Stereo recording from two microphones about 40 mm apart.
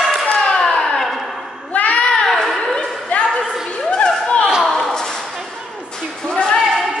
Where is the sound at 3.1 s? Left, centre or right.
Left.